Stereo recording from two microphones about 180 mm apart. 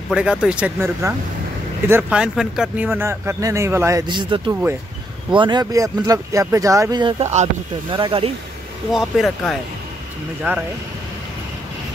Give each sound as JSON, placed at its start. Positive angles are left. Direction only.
{"t": 0.1, "sound": "speech", "side_deg": -5}
{"t": 8.9, "sound": "speech", "side_deg": 0}
{"t": 10.5, "sound": "speech", "side_deg": -10}